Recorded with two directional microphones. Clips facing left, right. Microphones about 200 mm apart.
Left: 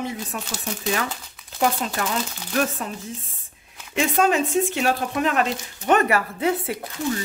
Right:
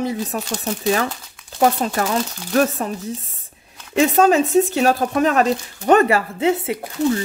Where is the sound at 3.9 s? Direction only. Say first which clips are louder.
Right 6 dB; 40° right (ahead or behind).